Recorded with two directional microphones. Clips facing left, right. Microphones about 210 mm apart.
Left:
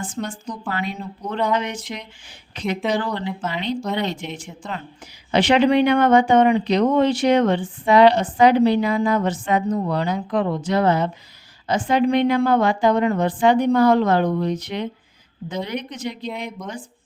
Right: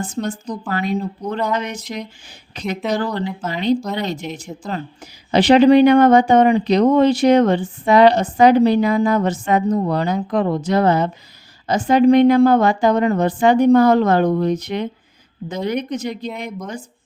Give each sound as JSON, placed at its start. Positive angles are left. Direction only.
{"t": 0.0, "sound": "a woman's voice", "side_deg": -40}